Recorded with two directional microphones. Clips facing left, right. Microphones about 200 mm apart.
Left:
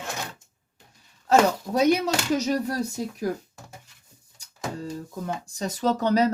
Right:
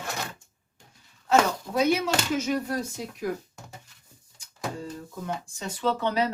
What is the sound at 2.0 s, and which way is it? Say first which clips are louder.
Speech: left 2 dB; 40° left (ahead or behind).